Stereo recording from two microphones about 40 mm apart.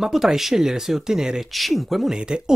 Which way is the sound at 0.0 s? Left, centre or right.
Centre.